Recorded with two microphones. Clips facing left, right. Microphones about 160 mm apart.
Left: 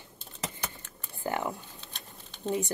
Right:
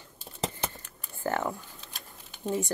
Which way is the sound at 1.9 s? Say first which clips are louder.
Even; 10° right (ahead or behind).